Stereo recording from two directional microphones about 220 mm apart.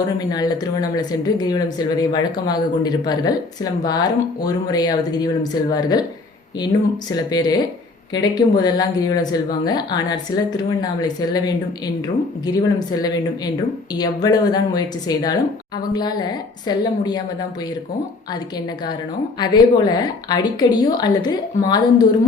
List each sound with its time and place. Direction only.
0.2 s speech: 20° left (ahead or behind)
19.4 s speech: 20° left (ahead or behind)